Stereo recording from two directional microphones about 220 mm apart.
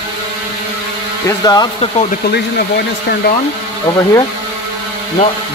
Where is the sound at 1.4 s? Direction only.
20° left (ahead or behind).